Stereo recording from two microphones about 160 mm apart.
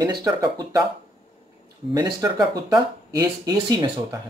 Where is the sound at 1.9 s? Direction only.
25° right (ahead or behind).